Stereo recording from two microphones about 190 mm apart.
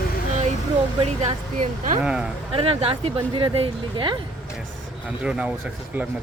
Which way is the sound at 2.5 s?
30° right (ahead or behind).